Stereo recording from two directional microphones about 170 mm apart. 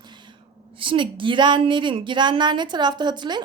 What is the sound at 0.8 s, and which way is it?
A woman's voice, 30° right (ahead or behind).